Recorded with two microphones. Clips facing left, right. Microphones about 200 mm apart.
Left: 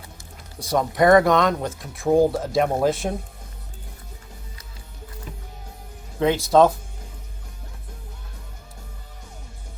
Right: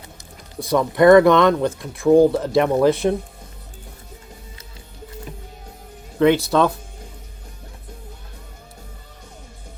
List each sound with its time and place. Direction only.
0.6 s speech: 55° right (ahead or behind)
6.1 s speech: 65° right (ahead or behind)